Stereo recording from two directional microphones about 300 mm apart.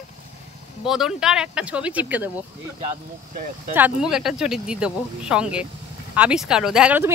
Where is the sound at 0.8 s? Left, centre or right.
Centre.